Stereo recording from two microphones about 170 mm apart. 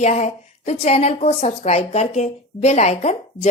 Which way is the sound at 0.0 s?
40° left (ahead or behind).